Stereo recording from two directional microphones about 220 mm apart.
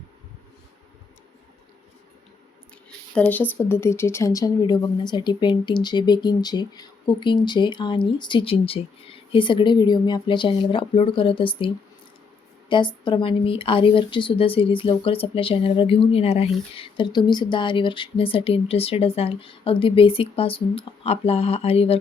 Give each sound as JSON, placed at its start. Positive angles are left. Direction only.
{"t": 3.2, "sound": "speech", "side_deg": 10}